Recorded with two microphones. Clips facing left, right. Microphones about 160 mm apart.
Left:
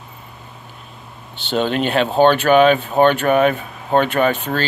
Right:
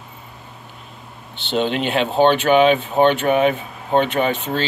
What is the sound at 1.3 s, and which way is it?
Speech, 20° right (ahead or behind).